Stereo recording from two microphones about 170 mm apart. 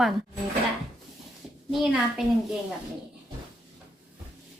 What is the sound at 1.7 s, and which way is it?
Speech, 5° right (ahead or behind).